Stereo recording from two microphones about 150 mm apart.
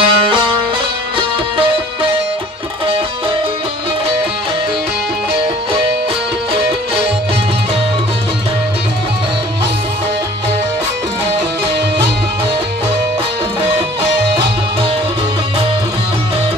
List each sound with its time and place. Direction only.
0.0 s music: 35° right (ahead or behind)